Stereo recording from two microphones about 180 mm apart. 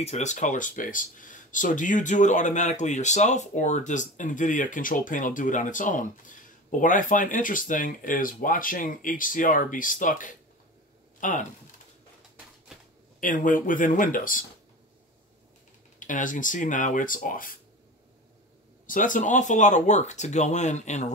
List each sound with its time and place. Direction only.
0.0 s speech: 40° left (ahead or behind)
13.2 s speech: 45° left (ahead or behind)
16.0 s speech: 45° left (ahead or behind)
18.9 s speech: 45° left (ahead or behind)